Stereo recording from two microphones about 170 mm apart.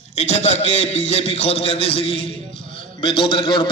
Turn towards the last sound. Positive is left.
turn(degrees=30)  # may be behind; listen again after turning